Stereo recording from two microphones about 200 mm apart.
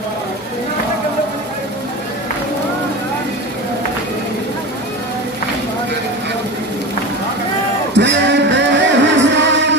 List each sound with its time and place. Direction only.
7.9 s music: 60° right (ahead or behind)